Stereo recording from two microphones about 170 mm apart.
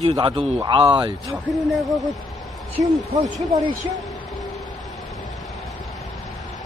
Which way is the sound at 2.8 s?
20° right (ahead or behind).